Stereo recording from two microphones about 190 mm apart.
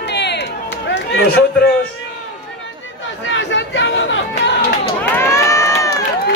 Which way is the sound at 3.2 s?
75° left (ahead or behind).